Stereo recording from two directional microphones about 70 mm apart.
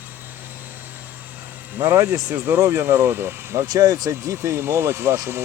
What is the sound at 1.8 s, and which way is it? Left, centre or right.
Speech, right.